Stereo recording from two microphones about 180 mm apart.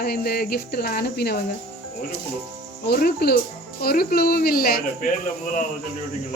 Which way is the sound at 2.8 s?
60° left (ahead or behind).